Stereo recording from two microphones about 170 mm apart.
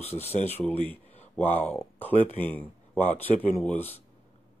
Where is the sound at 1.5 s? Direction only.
5° left (ahead or behind).